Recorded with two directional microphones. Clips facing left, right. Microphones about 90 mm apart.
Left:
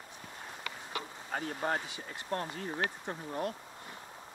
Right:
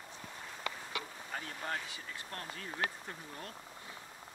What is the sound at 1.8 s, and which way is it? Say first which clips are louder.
Speech: left 3 dB; 20° left (ahead or behind).